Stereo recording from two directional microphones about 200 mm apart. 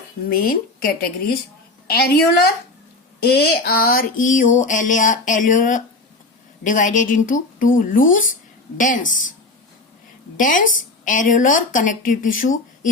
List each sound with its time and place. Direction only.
0.3 s speech: 45° left (ahead or behind)
3.2 s a woman's voice: 55° left (ahead or behind)
10.3 s a woman's voice: 40° left (ahead or behind)